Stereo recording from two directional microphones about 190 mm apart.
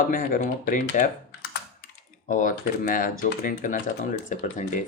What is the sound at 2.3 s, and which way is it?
Speech, 45° left (ahead or behind).